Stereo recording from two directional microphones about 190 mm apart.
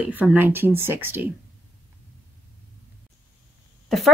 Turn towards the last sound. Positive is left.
turn(degrees=0)  # may be behind; listen again after turning